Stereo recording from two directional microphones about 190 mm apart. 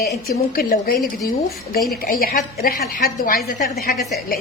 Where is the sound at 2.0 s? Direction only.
50° left (ahead or behind).